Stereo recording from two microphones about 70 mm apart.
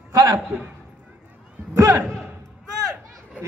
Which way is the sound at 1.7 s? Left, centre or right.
Right.